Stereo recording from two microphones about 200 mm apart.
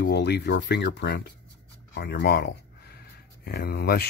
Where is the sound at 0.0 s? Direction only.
55° left (ahead or behind).